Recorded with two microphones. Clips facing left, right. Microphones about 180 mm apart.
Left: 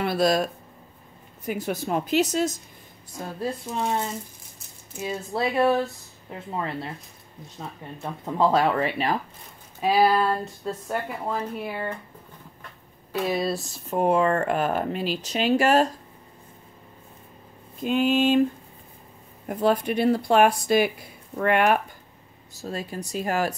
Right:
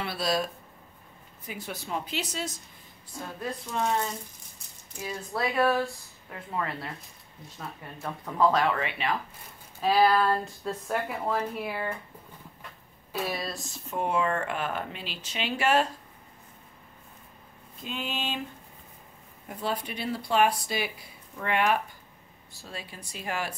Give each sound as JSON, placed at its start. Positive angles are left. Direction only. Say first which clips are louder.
{"t": 0.0, "sound": "speech", "louder": "left 7 dB", "side_deg": 50}
{"t": 3.3, "sound": "speech", "louder": "left 6 dB", "side_deg": 30}
{"t": 4.9, "sound": "speech", "louder": "left 5 dB", "side_deg": 25}
{"t": 9.8, "sound": "speech", "louder": "left 2 dB", "side_deg": 10}
{"t": 13.3, "sound": "speech", "louder": "left 9 dB", "side_deg": 25}
{"t": 13.8, "sound": "speech", "louder": "left 7 dB", "side_deg": 40}
{"t": 17.8, "sound": "speech", "louder": "left 14 dB", "side_deg": 50}
{"t": 19.4, "sound": "speech", "louder": "left 10 dB", "side_deg": 55}
{"t": 22.5, "sound": "speech", "louder": "left 10 dB", "side_deg": 45}